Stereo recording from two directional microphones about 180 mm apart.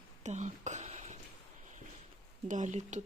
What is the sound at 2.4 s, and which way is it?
Speech, 40° right (ahead or behind).